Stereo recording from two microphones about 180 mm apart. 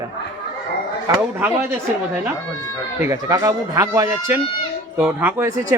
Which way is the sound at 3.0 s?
20° right (ahead or behind).